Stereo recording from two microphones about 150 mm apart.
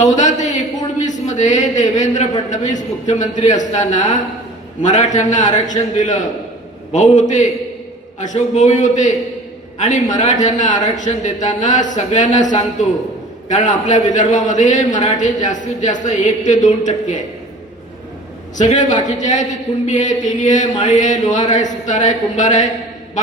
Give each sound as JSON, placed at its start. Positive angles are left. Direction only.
{"t": 0.0, "sound": "a sound", "side_deg": 55}
{"t": 1.0, "sound": "a man's voice", "side_deg": 55}
{"t": 18.5, "sound": "a man's voice", "side_deg": 55}